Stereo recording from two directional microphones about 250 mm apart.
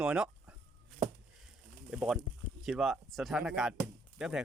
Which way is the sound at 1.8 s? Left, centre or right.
Centre.